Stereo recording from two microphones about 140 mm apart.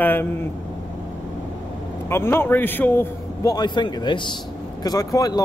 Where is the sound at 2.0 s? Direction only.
15° left (ahead or behind).